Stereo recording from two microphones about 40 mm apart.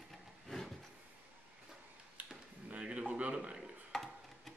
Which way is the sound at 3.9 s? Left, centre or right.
Centre.